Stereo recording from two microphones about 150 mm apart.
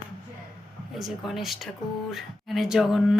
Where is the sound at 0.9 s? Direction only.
Centre (ahead or behind).